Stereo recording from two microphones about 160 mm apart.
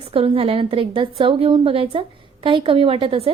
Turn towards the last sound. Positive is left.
turn(degrees=-35)  # may be behind; listen again after turning